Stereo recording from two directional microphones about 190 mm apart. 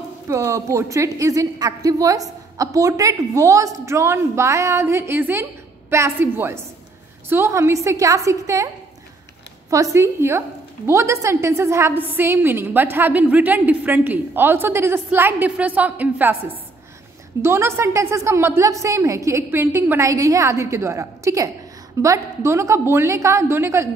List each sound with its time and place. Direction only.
0.3 s a woman's voice: 15° right (ahead or behind)
9.7 s a woman's voice: 15° right (ahead or behind)
17.4 s a woman's voice: 15° right (ahead or behind)